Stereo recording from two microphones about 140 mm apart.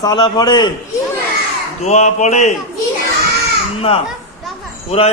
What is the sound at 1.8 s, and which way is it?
Speech, 55° left (ahead or behind).